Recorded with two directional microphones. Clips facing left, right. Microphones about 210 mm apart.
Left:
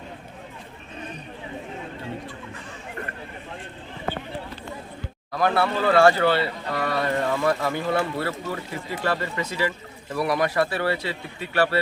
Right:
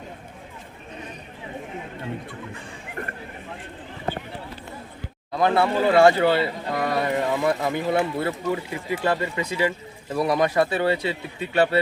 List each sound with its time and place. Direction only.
5.3 s speech: 25° right (ahead or behind)